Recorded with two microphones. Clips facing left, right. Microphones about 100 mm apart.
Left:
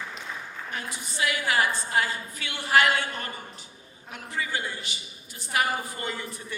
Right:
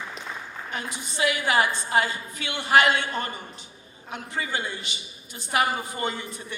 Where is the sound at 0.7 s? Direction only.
20° right (ahead or behind).